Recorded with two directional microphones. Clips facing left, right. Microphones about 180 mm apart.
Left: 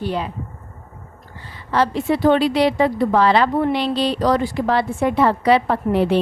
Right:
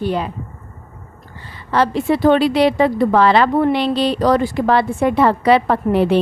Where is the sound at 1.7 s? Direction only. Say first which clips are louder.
Right 2 dB; 65° right (ahead or behind).